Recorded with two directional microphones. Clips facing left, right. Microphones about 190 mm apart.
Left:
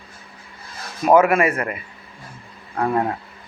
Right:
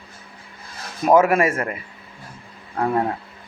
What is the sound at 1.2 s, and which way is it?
Speech, 40° right (ahead or behind).